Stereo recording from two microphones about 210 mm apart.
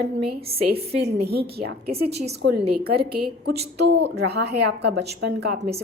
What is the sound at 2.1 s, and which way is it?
Speech, 30° right (ahead or behind).